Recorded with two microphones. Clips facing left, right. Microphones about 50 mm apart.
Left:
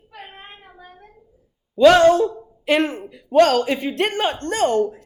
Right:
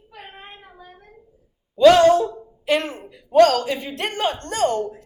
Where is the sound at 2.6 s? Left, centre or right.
Left.